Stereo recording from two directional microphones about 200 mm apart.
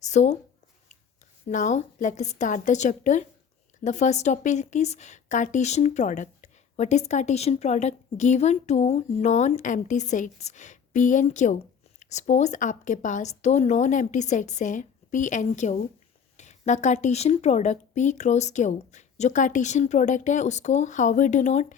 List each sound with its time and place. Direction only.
0.0 s speech: 35° left (ahead or behind)
1.5 s a woman's voice: 35° left (ahead or behind)